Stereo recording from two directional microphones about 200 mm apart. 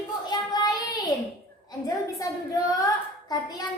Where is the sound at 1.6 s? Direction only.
20° left (ahead or behind).